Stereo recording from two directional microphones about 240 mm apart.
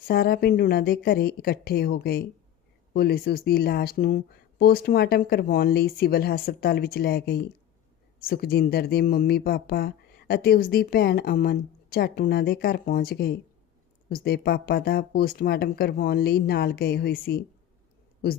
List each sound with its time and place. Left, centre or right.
0.1 s speech: left